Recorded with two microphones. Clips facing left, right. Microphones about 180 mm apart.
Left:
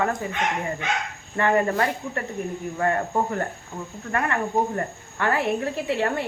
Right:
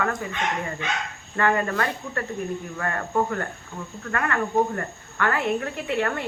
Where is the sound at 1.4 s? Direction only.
25° left (ahead or behind).